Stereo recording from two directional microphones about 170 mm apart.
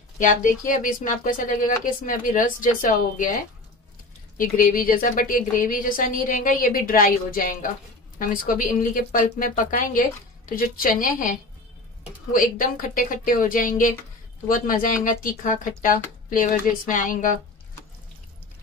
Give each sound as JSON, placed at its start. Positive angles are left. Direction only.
{"t": 0.2, "sound": "a woman's voice", "side_deg": 50}
{"t": 4.4, "sound": "a woman's voice", "side_deg": 55}